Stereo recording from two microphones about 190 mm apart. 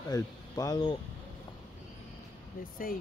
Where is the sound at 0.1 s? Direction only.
20° left (ahead or behind).